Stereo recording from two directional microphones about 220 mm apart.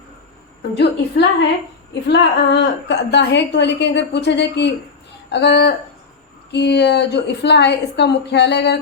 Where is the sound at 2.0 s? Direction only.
50° left (ahead or behind).